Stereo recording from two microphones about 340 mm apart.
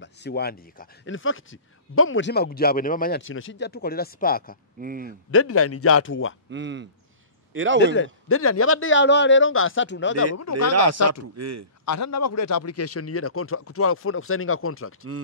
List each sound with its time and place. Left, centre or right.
0.0 s speech: left
4.7 s speech: right
5.3 s a man's voice: left
6.5 s speech: right
7.8 s a man's voice: left
10.7 s speech: right
11.8 s a man's voice: left